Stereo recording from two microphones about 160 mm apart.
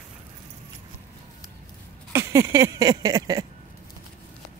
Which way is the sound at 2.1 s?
20° right (ahead or behind).